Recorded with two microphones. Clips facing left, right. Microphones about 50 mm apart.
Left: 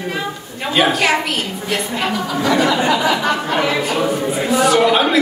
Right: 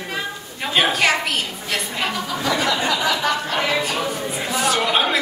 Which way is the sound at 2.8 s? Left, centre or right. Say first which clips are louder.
Left 4 dB; left.